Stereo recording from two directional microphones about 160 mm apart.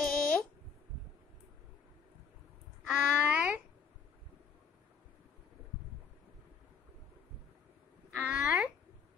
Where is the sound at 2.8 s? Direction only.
5° right (ahead or behind).